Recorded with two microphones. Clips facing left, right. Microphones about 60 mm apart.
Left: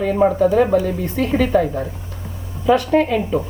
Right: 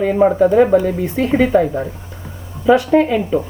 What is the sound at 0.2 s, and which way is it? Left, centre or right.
Speech, right.